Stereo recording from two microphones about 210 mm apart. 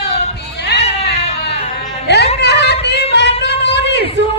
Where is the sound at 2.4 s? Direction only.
55° left (ahead or behind).